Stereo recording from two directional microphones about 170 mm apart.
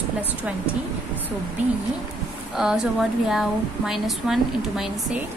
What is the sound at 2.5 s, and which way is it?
A woman's voice, 5° right (ahead or behind).